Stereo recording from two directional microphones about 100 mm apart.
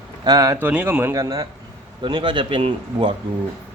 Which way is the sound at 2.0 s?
50° right (ahead or behind).